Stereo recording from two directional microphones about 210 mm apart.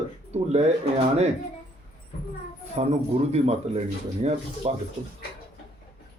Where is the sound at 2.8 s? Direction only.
30° right (ahead or behind).